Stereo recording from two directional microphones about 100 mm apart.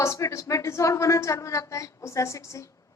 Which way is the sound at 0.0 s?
30° left (ahead or behind).